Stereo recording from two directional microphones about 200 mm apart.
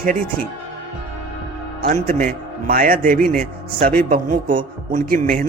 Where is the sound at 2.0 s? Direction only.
45° right (ahead or behind).